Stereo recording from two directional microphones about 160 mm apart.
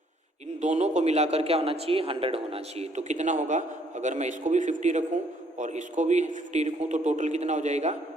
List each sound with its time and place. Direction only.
0.6 s a man's voice: 45° right (ahead or behind)